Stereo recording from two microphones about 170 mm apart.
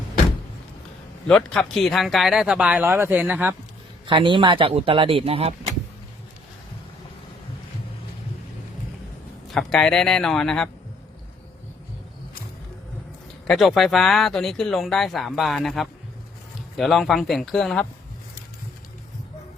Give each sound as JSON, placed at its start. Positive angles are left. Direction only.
{"t": 1.3, "sound": "speech", "side_deg": 5}
{"t": 4.0, "sound": "speech", "side_deg": -30}
{"t": 9.5, "sound": "speech", "side_deg": 0}
{"t": 13.5, "sound": "speech", "side_deg": 0}